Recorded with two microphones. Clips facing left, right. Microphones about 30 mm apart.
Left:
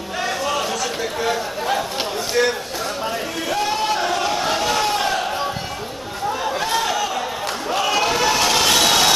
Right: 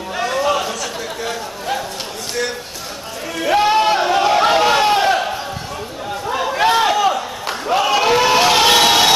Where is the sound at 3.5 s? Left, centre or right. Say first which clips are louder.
Right 8 dB; right.